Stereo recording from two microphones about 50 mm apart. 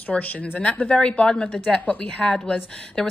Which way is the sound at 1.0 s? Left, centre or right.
Centre.